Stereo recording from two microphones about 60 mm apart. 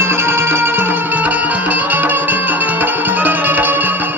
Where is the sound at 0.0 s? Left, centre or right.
Right.